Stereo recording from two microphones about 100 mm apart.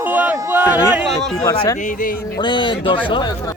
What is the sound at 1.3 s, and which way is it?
Speech, 35° left (ahead or behind).